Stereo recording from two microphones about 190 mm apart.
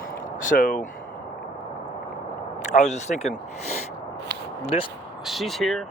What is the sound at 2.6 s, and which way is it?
Speech, 40° left (ahead or behind).